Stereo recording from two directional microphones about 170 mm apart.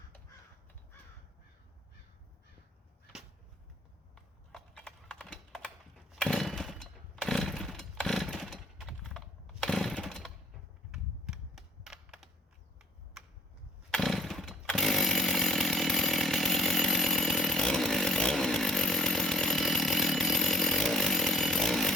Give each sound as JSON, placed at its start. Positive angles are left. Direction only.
{"t": 4.1, "sound": "computer keyboard", "side_deg": 5}
{"t": 6.1, "sound": "chainsaw", "side_deg": 0}
{"t": 10.9, "sound": "computer keyboard", "side_deg": -5}
{"t": 13.9, "sound": "chainsaw", "side_deg": 0}